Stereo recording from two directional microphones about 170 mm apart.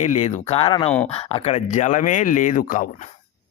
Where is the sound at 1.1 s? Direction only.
35° left (ahead or behind).